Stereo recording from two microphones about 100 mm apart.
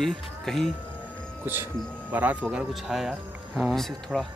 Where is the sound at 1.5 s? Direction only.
20° right (ahead or behind).